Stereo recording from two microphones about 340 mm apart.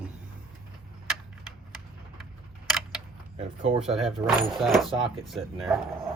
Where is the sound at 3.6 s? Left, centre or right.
Centre.